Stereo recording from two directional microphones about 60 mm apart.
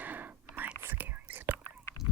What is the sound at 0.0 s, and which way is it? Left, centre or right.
Whispering, right.